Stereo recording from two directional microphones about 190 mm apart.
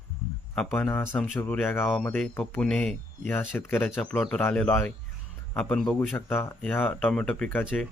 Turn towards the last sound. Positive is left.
turn(degrees=10)  # may be behind; listen again after turning